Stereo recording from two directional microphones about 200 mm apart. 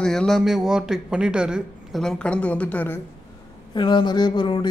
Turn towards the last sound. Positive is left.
turn(degrees=20)  # may be behind; listen again after turning